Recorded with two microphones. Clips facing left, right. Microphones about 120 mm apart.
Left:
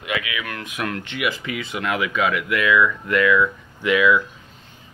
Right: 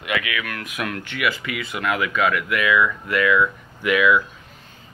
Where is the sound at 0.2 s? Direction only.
20° left (ahead or behind).